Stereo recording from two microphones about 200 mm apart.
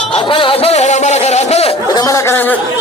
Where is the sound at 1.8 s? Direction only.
20° left (ahead or behind).